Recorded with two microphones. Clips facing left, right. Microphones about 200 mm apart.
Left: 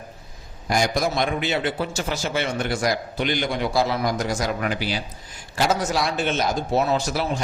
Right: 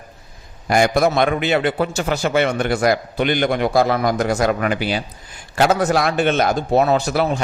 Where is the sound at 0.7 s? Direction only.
60° right (ahead or behind).